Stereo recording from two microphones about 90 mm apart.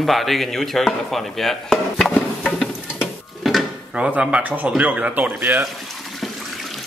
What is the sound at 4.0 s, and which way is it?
Speech, 15° right (ahead or behind).